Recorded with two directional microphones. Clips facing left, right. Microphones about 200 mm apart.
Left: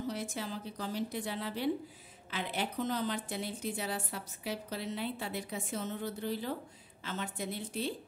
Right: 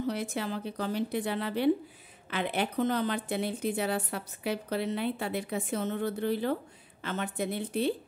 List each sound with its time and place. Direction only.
0.0 s a woman's voice: 65° right (ahead or behind)